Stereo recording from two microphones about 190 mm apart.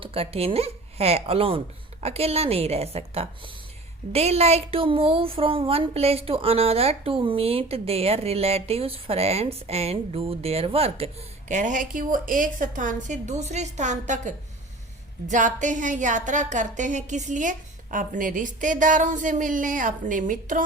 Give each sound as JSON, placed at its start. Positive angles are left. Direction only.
{"t": 0.0, "sound": "a woman's voice", "side_deg": -30}
{"t": 15.3, "sound": "a woman's voice", "side_deg": -40}